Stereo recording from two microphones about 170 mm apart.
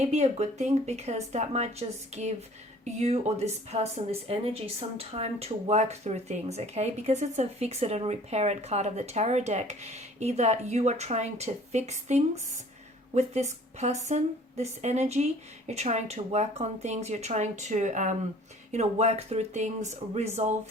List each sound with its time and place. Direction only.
0.0 s speech: 40° right (ahead or behind)
2.8 s speech: 40° right (ahead or behind)